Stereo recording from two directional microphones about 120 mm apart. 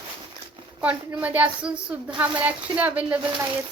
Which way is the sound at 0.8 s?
10° right (ahead or behind).